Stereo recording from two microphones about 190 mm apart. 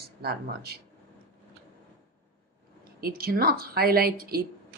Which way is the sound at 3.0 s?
50° right (ahead or behind).